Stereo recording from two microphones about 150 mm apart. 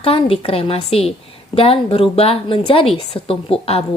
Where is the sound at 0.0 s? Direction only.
40° left (ahead or behind).